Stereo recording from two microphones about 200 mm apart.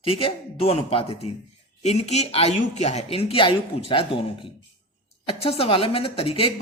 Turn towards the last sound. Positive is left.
turn(degrees=30)  # may be behind; listen again after turning